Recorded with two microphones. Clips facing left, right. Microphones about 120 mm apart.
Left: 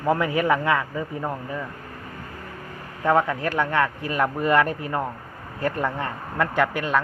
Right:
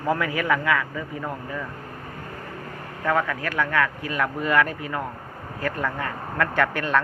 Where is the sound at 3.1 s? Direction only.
25° left (ahead or behind).